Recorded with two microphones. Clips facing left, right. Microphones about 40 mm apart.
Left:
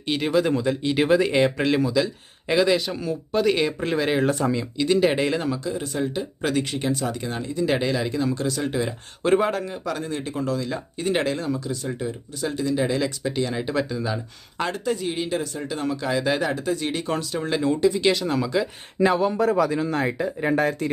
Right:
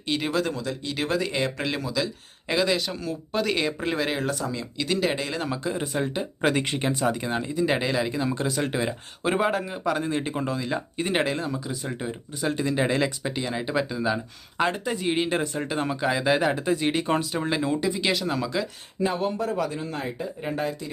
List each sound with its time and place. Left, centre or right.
0.0 s speech: centre
0.4 s speech: left
1.6 s speech: centre
4.3 s speech: left
4.8 s speech: centre
5.1 s speech: centre
5.8 s speech: centre
7.7 s speech: centre; by 8.9 s right
8.9 s speech: centre; by 13.3 s right
13.3 s speech: centre
15.1 s speech: right; by 18.7 s centre
19.0 s speech: left